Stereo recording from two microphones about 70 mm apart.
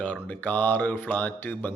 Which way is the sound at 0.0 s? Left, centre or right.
Left.